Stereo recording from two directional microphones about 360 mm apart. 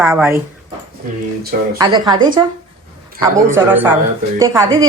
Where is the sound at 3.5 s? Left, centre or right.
Centre.